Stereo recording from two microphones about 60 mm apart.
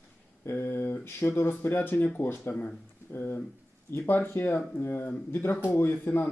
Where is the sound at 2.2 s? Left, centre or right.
Left.